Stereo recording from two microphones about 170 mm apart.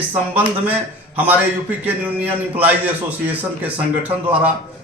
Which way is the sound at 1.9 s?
10° right (ahead or behind).